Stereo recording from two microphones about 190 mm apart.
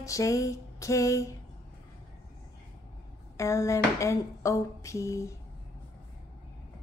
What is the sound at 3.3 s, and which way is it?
Female singing, 15° left (ahead or behind).